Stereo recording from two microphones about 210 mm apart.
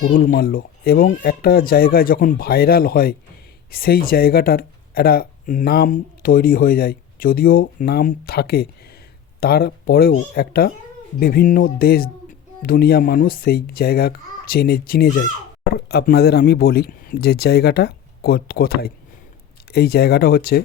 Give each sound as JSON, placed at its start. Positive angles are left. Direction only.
{"t": 0.1, "sound": "speech", "side_deg": 40}